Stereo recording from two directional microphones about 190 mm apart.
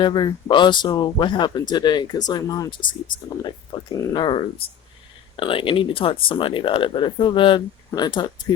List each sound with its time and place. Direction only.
0.0 s speech: 25° left (ahead or behind)
3.9 s speech: 20° left (ahead or behind)